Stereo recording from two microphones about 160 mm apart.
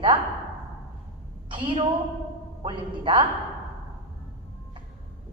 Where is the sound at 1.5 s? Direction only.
30° right (ahead or behind).